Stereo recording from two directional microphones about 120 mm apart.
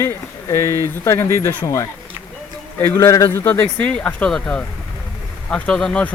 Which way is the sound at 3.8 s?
10° left (ahead or behind).